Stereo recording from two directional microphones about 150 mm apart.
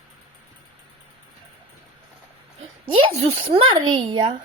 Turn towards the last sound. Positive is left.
turn(degrees=-35)  # may be behind; listen again after turning